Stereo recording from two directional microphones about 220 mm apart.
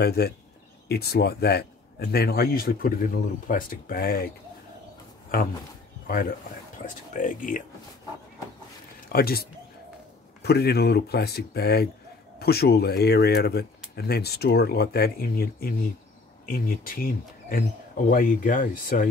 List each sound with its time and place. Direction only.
0.0 s speech: 45° left (ahead or behind)
5.3 s speech: 40° left (ahead or behind)
9.1 s speech: 45° left (ahead or behind)